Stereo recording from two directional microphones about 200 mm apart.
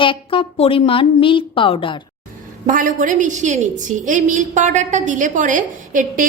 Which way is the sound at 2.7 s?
40° right (ahead or behind).